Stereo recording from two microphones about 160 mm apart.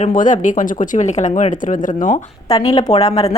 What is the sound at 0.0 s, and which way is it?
Speech, 55° left (ahead or behind).